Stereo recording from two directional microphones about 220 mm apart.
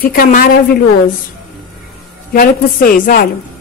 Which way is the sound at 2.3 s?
40° left (ahead or behind).